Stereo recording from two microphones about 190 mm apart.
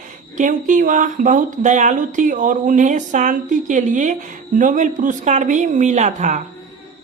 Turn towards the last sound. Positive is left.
turn(degrees=-40)  # may be behind; listen again after turning